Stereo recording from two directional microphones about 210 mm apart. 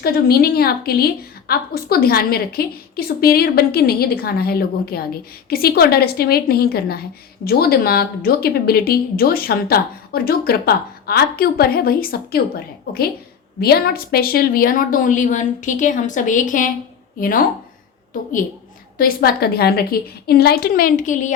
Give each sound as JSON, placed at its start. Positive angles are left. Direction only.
{"t": 0.0, "sound": "a woman's voice", "side_deg": 45}